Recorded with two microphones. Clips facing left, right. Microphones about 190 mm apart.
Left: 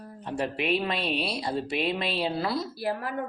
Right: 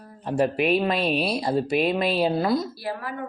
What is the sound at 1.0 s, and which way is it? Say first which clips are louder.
Speech: right 6 dB; 55° right (ahead or behind).